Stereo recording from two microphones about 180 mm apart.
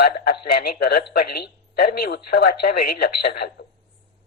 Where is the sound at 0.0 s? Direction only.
60° left (ahead or behind).